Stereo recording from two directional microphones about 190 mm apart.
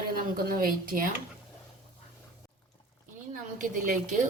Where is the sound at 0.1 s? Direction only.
50° right (ahead or behind).